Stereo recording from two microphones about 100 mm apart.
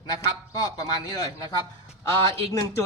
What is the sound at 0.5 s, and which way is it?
Speech, 40° left (ahead or behind).